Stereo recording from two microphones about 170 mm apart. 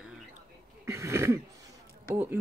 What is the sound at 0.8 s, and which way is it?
Throat clearing, 15° right (ahead or behind).